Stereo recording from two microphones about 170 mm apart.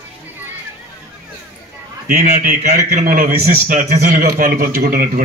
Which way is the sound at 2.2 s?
45° right (ahead or behind).